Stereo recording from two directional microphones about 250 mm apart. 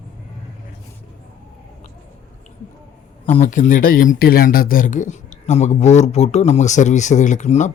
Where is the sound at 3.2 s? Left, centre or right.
Left.